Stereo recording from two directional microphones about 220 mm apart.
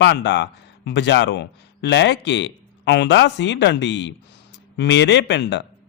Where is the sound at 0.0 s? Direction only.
55° left (ahead or behind).